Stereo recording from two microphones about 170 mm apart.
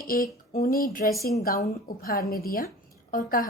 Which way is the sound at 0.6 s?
60° left (ahead or behind).